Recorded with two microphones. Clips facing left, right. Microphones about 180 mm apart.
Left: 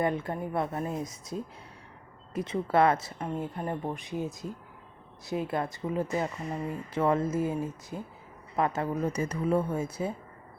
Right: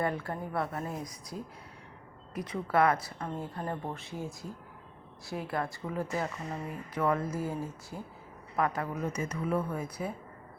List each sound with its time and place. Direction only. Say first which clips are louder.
0.0 s speech: left 3 dB; 20° left (ahead or behind)